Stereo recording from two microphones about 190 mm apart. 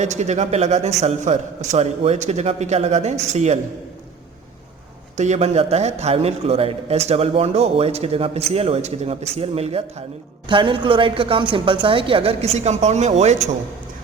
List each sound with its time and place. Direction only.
0.0 s a man's voice: 35° right (ahead or behind)
5.1 s a man's voice: 40° right (ahead or behind)